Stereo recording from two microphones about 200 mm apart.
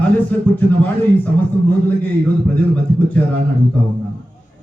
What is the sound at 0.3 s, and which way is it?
A man's voice, 10° left (ahead or behind).